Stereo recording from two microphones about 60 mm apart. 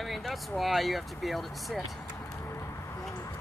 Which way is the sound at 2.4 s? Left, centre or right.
Left.